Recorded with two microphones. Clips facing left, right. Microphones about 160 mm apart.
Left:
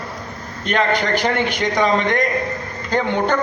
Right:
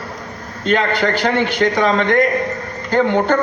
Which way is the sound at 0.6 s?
15° left (ahead or behind).